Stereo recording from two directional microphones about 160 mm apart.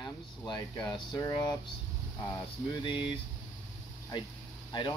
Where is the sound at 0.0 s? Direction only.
25° left (ahead or behind).